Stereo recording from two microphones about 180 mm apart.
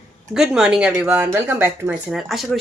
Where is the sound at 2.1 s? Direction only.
Centre (ahead or behind).